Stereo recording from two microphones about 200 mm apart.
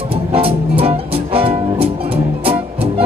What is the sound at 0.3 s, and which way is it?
Music, 30° right (ahead or behind).